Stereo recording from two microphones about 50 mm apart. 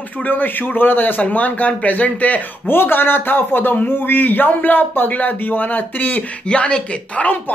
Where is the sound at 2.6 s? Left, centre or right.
Left.